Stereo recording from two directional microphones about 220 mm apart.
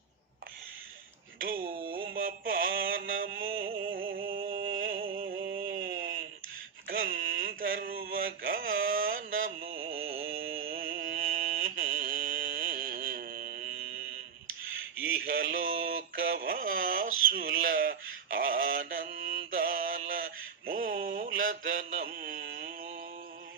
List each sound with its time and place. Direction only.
1.4 s speech: 40° right (ahead or behind)
1.9 s mantra: 40° right (ahead or behind)
7.0 s a sound: 40° right (ahead or behind)
8.9 s mantra: 40° right (ahead or behind)
9.7 s music: 40° right (ahead or behind)
15.3 s a sound: 40° right (ahead or behind)
18.3 s mantra: 40° right (ahead or behind)
19.5 s male singing: 40° right (ahead or behind)
21.7 s mantra: 40° right (ahead or behind)